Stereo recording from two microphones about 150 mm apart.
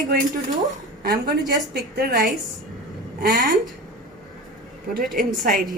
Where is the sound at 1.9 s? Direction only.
80° right.